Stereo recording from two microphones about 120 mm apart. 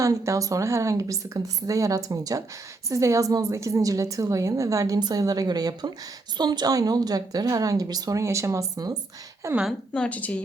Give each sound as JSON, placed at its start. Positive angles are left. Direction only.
{"t": 0.0, "sound": "a woman's voice", "side_deg": -25}
{"t": 9.9, "sound": "a woman's voice", "side_deg": 10}